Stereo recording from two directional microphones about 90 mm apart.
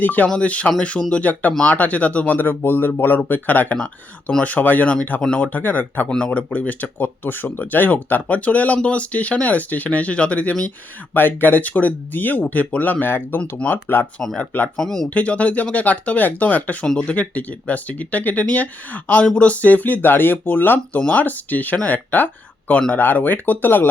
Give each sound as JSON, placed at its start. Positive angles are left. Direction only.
{"t": 0.0, "sound": "speech", "side_deg": 20}
{"t": 14.2, "sound": "speech", "side_deg": 5}
{"t": 15.1, "sound": "speech", "side_deg": 15}